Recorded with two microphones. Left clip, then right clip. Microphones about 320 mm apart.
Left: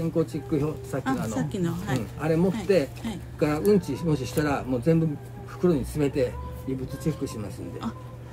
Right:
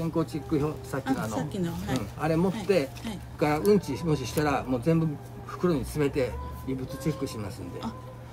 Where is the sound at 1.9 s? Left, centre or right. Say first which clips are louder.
Left 1 dB; centre.